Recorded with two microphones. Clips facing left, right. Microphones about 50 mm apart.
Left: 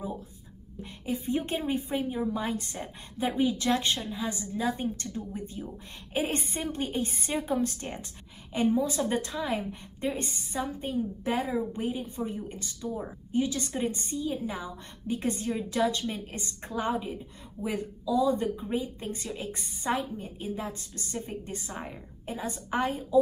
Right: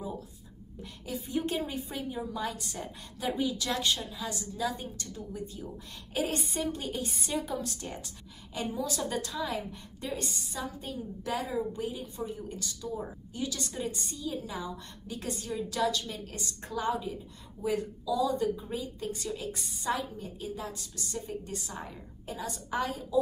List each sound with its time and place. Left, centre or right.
1.0 s a woman's voice: left
12.8 s a woman's voice: centre
13.3 s a woman's voice: left